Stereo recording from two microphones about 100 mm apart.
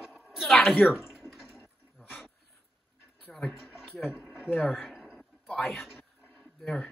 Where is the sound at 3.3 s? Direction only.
5° left (ahead or behind).